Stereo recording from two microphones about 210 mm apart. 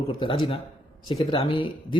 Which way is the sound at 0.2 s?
25° left (ahead or behind).